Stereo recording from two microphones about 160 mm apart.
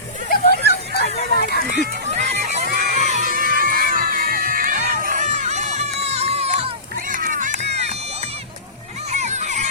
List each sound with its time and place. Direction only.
0.3 s a sound: 90° left
1.4 s run: 80° left
1.7 s a sound: 45° right (ahead or behind)
2.6 s children shouting: 50° right (ahead or behind)
4.9 s crowd: 55° right (ahead or behind); by 6.7 s 40° right (ahead or behind)
7.1 s music: 55° right (ahead or behind)
9.1 s children playing: 45° right (ahead or behind)